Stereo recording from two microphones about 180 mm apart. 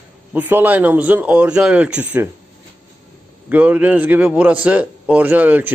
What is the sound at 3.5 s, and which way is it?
A man's voice, 10° right (ahead or behind).